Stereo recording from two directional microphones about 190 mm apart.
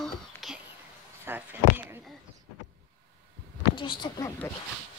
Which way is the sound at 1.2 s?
10° right (ahead or behind).